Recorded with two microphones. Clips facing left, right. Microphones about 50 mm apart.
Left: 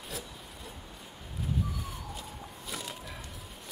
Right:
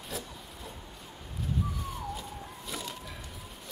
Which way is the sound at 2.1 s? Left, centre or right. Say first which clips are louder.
Right 3 dB; centre.